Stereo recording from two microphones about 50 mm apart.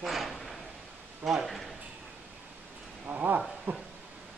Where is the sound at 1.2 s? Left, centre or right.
Centre.